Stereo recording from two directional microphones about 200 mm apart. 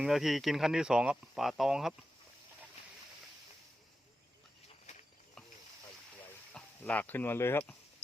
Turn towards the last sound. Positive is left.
turn(degrees=10)  # may be behind; listen again after turning